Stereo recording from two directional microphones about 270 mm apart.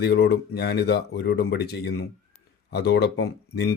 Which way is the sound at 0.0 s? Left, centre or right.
Left.